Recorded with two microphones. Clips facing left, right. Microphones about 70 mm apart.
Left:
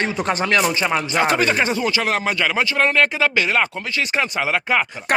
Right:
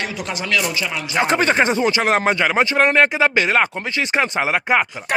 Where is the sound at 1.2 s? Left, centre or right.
Right.